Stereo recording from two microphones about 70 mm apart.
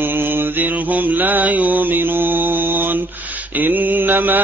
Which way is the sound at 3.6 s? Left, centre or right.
Right.